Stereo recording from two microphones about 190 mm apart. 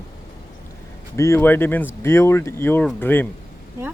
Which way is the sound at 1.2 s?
15° left (ahead or behind).